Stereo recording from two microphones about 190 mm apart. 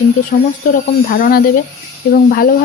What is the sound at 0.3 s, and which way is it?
Speech, 45° left (ahead or behind).